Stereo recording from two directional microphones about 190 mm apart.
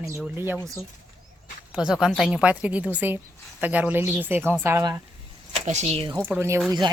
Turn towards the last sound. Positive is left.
turn(degrees=-25)  # may be behind; listen again after turning